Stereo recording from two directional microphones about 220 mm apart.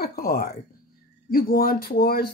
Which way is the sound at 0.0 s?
45° left (ahead or behind).